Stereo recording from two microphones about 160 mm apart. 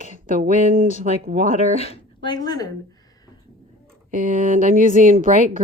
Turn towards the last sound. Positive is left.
turn(degrees=-55)  # may be behind; listen again after turning